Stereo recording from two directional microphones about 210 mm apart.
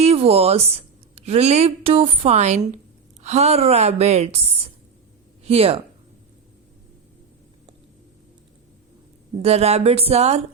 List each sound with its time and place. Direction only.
0.0 s a woman's voice: 30° right (ahead or behind)
9.4 s a woman's voice: 30° right (ahead or behind)